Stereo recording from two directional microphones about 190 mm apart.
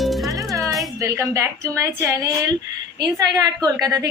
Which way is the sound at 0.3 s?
15° right (ahead or behind).